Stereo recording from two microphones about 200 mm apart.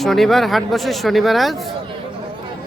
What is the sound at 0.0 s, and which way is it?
Speech, centre (ahead or behind).